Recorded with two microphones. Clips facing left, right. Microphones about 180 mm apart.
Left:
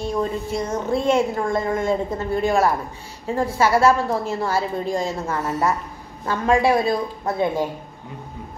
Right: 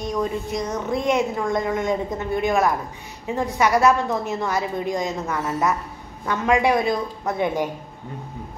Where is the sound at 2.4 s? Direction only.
35° left (ahead or behind).